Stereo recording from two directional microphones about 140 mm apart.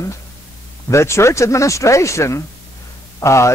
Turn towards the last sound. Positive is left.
turn(degrees=20)  # may be behind; listen again after turning